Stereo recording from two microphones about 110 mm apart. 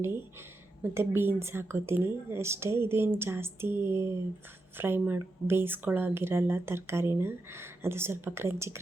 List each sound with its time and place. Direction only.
0.8 s speech: 20° right (ahead or behind)